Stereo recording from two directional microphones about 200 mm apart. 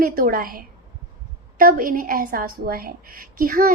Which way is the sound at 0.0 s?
45° right (ahead or behind).